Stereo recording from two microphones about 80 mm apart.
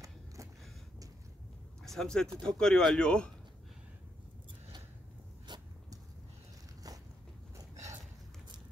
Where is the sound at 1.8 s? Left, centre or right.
Centre.